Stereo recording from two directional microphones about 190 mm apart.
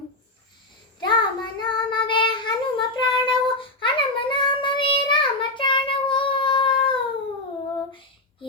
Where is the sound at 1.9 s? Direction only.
25° left (ahead or behind).